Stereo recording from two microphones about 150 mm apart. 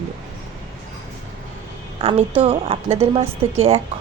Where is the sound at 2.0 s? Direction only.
40° right (ahead or behind).